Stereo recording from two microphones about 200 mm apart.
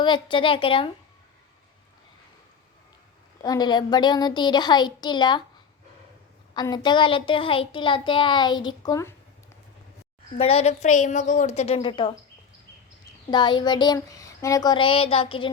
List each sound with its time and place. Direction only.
0.0 s a child's voice: 25° left (ahead or behind)
3.4 s a child's voice: 20° left (ahead or behind)
6.5 s a child's voice: 20° left (ahead or behind)
10.3 s a woman's voice: 30° left (ahead or behind)
13.3 s a child's voice: 20° left (ahead or behind)